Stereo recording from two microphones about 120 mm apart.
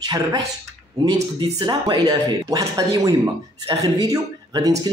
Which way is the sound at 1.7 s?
35° right (ahead or behind).